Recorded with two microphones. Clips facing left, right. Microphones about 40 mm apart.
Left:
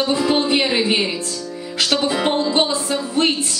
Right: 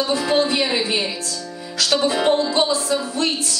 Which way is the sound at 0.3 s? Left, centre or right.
Left.